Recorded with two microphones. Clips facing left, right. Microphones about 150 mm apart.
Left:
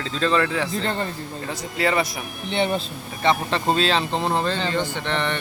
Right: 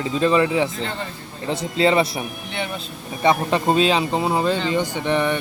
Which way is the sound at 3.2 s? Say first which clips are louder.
Right 3 dB; 15° right (ahead or behind).